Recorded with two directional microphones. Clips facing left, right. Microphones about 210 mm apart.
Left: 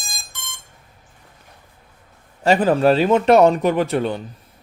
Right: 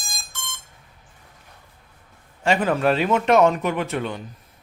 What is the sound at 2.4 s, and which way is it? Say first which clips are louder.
Speech: left 5 dB; 35° left (ahead or behind).